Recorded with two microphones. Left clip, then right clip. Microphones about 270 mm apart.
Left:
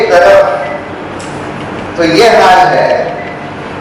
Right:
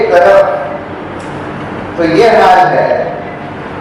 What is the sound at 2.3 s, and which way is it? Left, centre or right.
Speech, centre.